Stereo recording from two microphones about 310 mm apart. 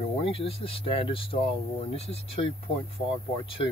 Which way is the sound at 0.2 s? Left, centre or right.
Centre.